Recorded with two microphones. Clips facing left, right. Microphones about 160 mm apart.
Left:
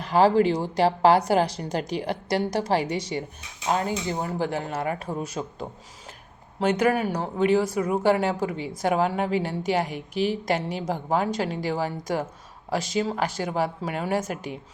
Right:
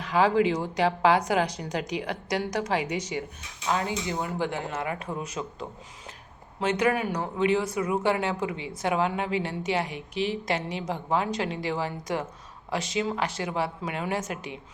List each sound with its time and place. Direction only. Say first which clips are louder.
0.0 s a woman's voice: left 3 dB; 35° left (ahead or behind)
7.0 s a woman's voice: left 2 dB; 35° left (ahead or behind)